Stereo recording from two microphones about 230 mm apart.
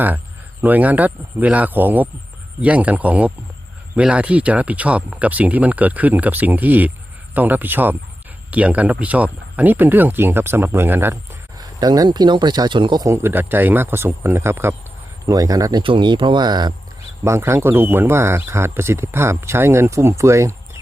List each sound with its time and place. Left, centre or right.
0.6 s speech: centre